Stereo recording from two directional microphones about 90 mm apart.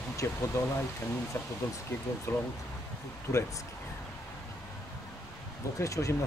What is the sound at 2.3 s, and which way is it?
Speech, 25° left (ahead or behind).